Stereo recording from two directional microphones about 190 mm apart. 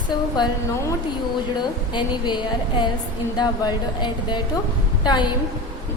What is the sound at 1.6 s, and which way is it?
A woman's voice, 25° left (ahead or behind).